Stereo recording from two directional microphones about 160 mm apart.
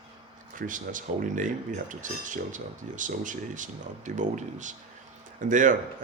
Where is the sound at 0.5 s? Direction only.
55° right (ahead or behind).